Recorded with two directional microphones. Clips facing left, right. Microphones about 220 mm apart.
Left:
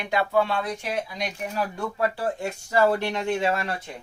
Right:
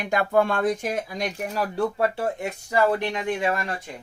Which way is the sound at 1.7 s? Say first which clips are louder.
Right 4 dB; 25° right (ahead or behind).